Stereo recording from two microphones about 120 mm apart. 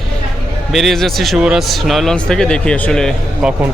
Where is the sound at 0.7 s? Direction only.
Centre (ahead or behind).